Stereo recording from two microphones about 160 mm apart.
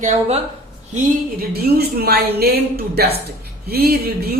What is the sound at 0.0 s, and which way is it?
Speech, 50° right (ahead or behind).